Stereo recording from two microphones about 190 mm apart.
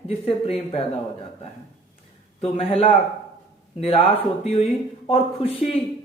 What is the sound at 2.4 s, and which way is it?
Speech, 30° left (ahead or behind).